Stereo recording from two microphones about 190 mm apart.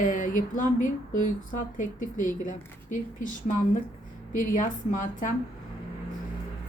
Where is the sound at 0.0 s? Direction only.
45° left (ahead or behind).